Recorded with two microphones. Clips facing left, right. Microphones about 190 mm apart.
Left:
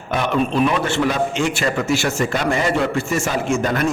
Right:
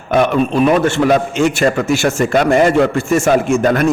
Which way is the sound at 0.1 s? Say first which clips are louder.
Right 6 dB; 50° right (ahead or behind).